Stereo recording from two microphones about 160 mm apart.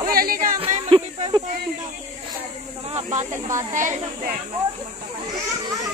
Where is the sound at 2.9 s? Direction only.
45° right (ahead or behind).